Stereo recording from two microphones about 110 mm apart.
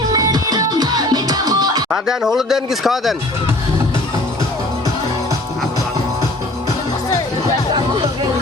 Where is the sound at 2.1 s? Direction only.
5° right (ahead or behind).